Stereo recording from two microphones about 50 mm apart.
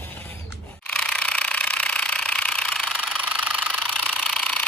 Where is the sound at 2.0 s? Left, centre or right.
Left.